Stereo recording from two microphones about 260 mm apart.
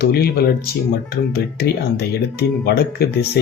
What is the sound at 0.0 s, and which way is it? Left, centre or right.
Speech, left.